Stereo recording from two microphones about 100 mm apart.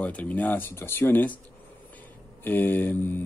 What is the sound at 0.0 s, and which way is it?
A man's voice, 15° left (ahead or behind).